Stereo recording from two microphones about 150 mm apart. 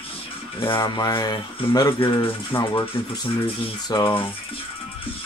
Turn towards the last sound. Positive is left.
turn(degrees=35)  # may be behind; listen again after turning